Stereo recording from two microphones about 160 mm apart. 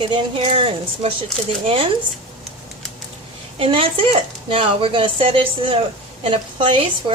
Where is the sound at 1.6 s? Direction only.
35° right (ahead or behind).